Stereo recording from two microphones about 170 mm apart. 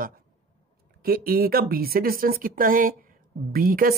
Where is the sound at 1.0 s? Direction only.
60° right (ahead or behind).